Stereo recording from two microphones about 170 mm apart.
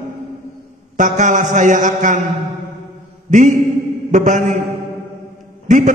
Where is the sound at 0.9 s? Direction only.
45° right (ahead or behind).